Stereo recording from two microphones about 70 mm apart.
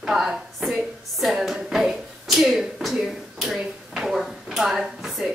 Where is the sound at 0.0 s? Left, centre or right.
Centre.